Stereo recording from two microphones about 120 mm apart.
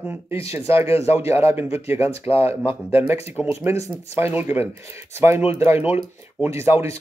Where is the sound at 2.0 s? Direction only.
55° left (ahead or behind).